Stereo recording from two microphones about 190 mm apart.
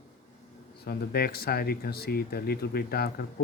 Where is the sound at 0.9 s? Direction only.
55° left (ahead or behind).